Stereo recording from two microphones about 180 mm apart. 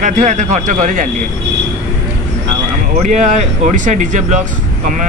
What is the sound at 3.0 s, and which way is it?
Speech, 40° right (ahead or behind).